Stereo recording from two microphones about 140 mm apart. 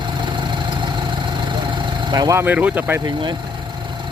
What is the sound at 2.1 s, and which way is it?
Speech, 30° right (ahead or behind).